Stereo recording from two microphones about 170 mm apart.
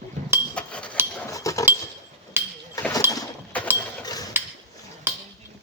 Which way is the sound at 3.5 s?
10° left (ahead or behind).